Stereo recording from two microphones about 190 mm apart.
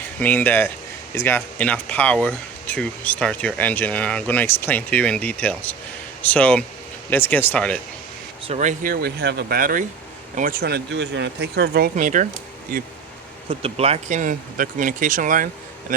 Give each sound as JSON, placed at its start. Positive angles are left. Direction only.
{"t": 0.2, "sound": "speech", "side_deg": 10}
{"t": 8.4, "sound": "speech", "side_deg": -40}
{"t": 13.5, "sound": "speech", "side_deg": -30}